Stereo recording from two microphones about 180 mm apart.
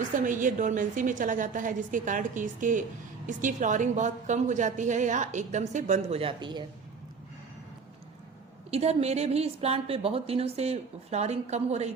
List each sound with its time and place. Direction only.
0.0 s a woman's voice: 45° right (ahead or behind); by 6.7 s 25° right (ahead or behind)
8.7 s a woman's voice: 35° right (ahead or behind)